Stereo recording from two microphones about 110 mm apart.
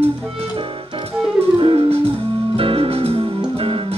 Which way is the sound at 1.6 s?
60° right (ahead or behind).